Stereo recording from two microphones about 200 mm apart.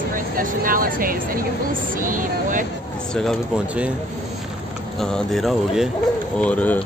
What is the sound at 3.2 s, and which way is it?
Speech, centre (ahead or behind).